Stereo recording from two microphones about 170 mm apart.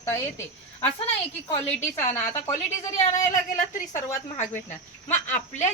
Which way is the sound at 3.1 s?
50° left (ahead or behind).